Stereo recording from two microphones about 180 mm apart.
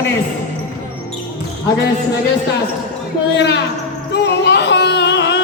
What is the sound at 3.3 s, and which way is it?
Speech, 70° left (ahead or behind).